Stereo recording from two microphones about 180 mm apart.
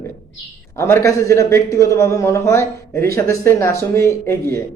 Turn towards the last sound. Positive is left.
turn(degrees=15)  # may be behind; listen again after turning